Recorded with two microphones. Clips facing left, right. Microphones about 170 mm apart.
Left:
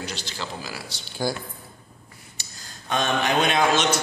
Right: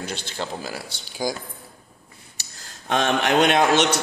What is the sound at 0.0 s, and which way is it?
A man's voice, 55° right (ahead or behind).